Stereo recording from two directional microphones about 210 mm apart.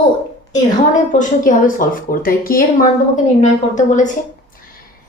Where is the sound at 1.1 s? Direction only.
40° left (ahead or behind).